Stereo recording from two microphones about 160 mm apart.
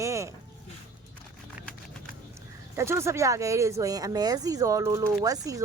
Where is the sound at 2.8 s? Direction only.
15° right (ahead or behind).